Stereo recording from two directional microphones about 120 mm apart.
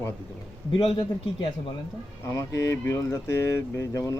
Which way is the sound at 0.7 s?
45° left (ahead or behind).